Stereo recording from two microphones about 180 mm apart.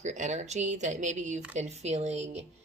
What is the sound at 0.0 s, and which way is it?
Speech, 40° right (ahead or behind).